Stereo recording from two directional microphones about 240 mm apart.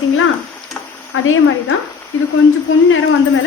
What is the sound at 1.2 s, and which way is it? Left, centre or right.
Speech, left.